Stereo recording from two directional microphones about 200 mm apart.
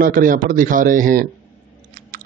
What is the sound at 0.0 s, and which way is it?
A man's voice, 45° right (ahead or behind).